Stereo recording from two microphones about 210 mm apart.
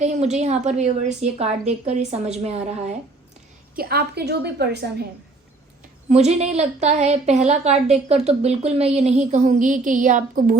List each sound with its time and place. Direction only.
0.0 s a woman's voice: 35° right (ahead or behind)
3.8 s a woman's voice: 45° right (ahead or behind)
6.1 s a woman's voice: 30° right (ahead or behind)